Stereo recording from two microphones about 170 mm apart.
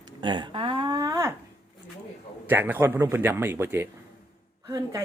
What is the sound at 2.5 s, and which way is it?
A woman's voice, 10° right (ahead or behind).